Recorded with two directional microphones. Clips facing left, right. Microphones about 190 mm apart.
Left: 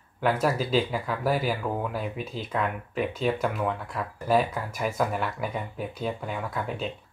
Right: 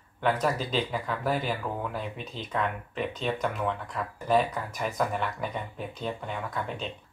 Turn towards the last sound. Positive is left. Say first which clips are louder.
# left 2 dB
turn(degrees=5)  # may be behind; listen again after turning